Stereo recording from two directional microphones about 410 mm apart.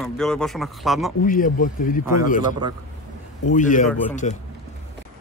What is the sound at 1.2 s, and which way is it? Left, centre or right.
Speech, centre.